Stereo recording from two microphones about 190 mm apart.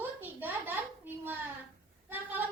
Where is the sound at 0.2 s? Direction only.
10° right (ahead or behind).